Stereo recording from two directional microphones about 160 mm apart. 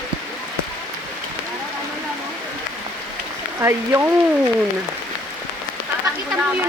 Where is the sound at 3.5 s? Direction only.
15° right (ahead or behind).